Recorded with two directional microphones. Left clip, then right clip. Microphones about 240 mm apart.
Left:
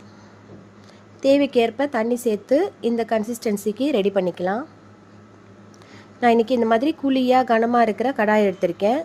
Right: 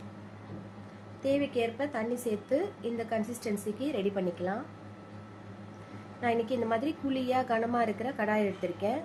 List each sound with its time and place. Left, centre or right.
1.2 s a woman's voice: left
6.1 s a woman's voice: left